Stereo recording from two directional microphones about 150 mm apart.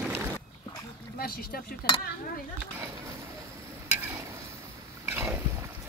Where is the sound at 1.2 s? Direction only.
85° left.